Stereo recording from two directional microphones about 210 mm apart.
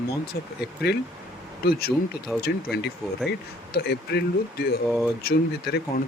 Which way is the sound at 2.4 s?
50° left (ahead or behind).